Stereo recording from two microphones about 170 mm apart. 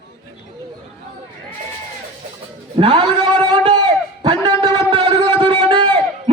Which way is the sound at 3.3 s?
25° right (ahead or behind).